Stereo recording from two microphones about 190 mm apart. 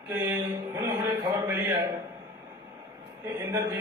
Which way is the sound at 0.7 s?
20° right (ahead or behind).